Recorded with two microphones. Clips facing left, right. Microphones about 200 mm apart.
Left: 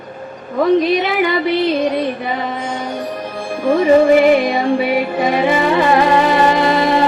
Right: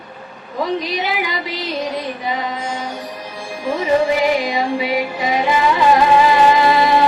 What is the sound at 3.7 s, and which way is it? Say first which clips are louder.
Music: left 6 dB; 55° left (ahead or behind).